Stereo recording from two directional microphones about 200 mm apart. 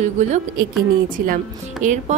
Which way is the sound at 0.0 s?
35° right (ahead or behind).